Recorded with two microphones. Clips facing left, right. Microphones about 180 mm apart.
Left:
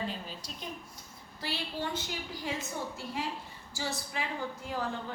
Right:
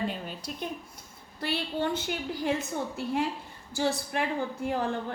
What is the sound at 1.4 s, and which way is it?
A woman's voice, 55° right (ahead or behind).